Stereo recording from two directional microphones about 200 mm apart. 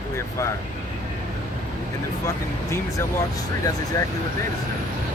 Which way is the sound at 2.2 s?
15° left (ahead or behind).